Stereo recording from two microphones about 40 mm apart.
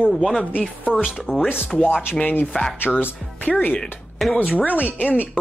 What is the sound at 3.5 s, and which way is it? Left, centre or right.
Speech, left.